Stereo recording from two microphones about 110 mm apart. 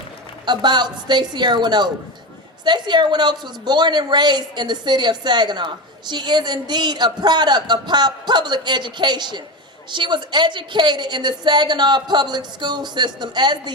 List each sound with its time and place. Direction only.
0.4 s a woman's voice: 40° right (ahead or behind)